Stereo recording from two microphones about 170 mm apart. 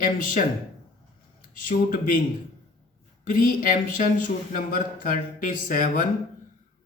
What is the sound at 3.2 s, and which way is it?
Speech, 55° left (ahead or behind).